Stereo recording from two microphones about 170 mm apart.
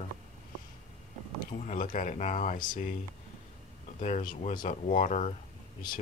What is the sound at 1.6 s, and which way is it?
Speech, 50° left (ahead or behind).